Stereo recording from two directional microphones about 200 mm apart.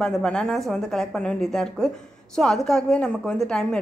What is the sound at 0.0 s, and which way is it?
A woman's voice, 5° left (ahead or behind).